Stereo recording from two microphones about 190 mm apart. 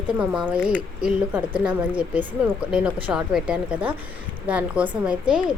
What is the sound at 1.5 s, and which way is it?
Speech, 25° right (ahead or behind).